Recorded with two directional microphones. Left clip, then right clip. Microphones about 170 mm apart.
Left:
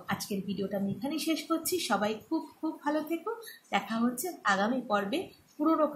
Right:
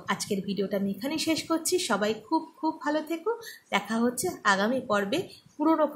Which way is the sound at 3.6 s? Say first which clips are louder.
Right 3 dB; 40° right (ahead or behind).